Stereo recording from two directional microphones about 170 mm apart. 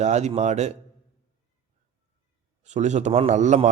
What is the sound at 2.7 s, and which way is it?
A man's voice, 45° right (ahead or behind).